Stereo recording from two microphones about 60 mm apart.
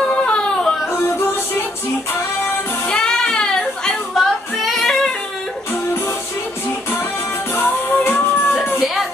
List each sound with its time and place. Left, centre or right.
0.1 s yodeling: centre
2.9 s music: centre
7.5 s music: left